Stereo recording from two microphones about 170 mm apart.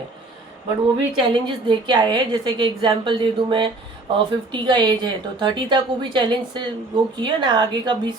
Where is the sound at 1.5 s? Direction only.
30° right (ahead or behind).